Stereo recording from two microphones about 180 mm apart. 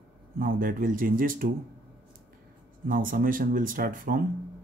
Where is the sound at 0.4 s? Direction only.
50° right (ahead or behind).